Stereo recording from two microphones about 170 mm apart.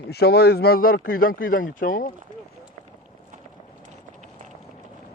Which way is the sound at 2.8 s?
45° right (ahead or behind).